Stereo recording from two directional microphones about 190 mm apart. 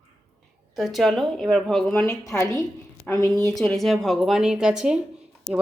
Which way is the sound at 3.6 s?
Centre (ahead or behind).